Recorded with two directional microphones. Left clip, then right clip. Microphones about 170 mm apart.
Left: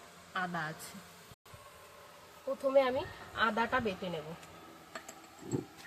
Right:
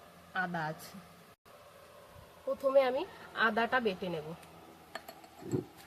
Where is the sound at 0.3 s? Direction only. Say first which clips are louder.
Right 1 dB; 20° right (ahead or behind).